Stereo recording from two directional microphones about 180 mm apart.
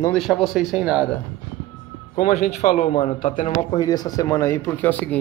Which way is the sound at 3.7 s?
20° left (ahead or behind).